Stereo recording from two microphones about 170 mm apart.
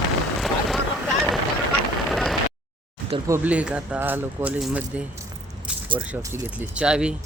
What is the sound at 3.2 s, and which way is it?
Speech, 10° right (ahead or behind).